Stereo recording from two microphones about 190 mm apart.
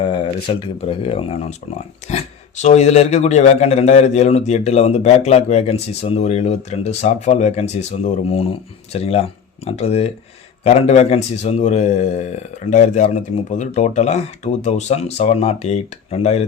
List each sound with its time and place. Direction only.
0.0 s speech: 25° left (ahead or behind)
2.6 s a man's voice: 35° left (ahead or behind)